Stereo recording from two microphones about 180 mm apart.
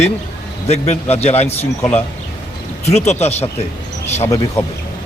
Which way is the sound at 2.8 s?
35° left (ahead or behind).